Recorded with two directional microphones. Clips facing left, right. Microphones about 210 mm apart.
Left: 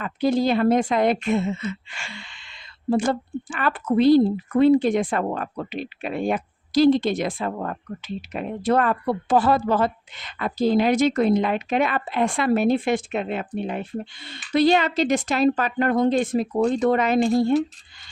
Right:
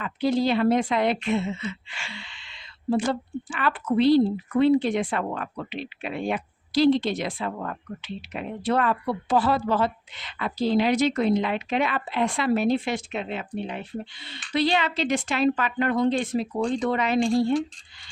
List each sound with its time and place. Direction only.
0.0 s a woman's voice: 45° left (ahead or behind)